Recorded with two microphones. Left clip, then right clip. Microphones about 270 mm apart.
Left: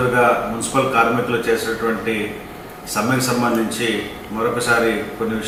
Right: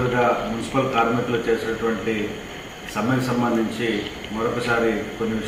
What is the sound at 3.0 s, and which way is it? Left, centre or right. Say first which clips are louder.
A man's voice: left 4 dB; centre.